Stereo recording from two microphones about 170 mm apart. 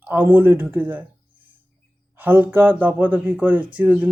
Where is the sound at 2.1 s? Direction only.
10° right (ahead or behind).